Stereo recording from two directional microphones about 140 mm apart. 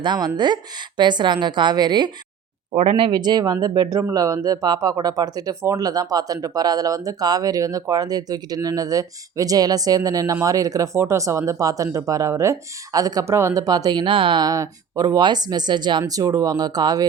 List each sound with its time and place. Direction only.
0.0 s a woman's voice: 30° right (ahead or behind)
2.7 s speech: 40° right (ahead or behind)